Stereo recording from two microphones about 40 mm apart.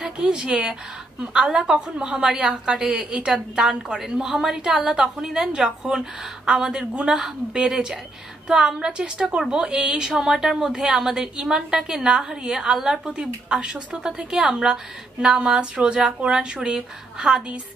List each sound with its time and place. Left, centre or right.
0.2 s a woman's voice: right